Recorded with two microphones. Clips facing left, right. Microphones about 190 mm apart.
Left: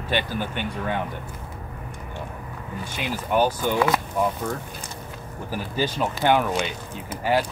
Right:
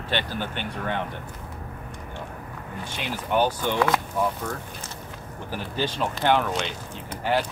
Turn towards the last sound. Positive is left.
turn(degrees=10)  # may be behind; listen again after turning